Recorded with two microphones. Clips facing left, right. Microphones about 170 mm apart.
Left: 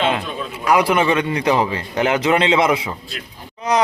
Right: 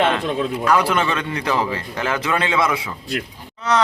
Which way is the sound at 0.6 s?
15° left (ahead or behind).